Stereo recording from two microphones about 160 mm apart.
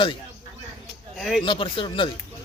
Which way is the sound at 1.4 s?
30° left (ahead or behind).